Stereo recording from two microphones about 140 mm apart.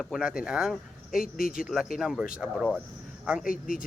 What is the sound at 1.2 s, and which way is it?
Speech, 80° left.